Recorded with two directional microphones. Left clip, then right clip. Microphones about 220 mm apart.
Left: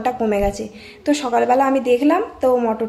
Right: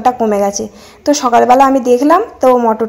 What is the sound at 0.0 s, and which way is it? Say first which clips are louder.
Speech: right 8 dB; 20° right (ahead or behind).